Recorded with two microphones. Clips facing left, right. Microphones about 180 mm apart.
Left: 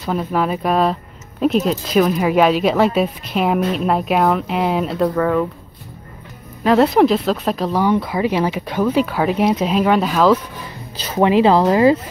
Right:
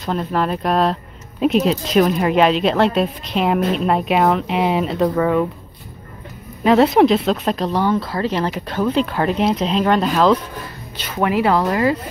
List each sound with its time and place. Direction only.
0.0 s speech: 5° left (ahead or behind)
6.6 s speech: centre (ahead or behind)
11.1 s speech: 25° left (ahead or behind)